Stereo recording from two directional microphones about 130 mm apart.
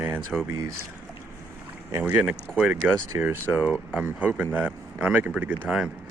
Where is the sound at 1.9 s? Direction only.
20° right (ahead or behind).